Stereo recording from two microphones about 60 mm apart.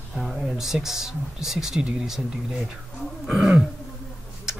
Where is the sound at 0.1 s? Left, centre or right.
Centre.